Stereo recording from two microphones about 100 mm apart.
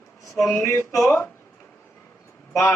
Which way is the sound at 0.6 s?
30° left (ahead or behind).